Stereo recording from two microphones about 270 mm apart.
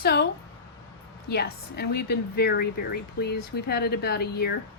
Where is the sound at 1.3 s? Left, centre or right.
Left.